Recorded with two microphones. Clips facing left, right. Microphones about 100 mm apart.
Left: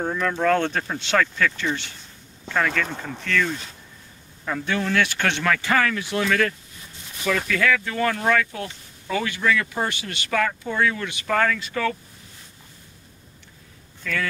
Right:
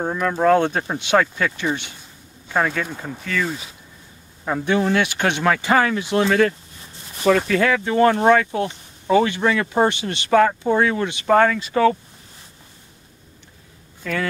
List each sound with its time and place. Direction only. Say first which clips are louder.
0.0 s speech: right 4 dB; 15° right (ahead or behind)
4.5 s speech: right 6 dB; 20° right (ahead or behind)
14.0 s speech: right 3 dB; 35° right (ahead or behind)